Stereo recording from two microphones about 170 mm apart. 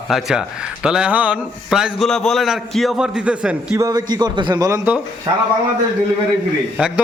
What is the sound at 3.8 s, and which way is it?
A man's voice, 25° right (ahead or behind).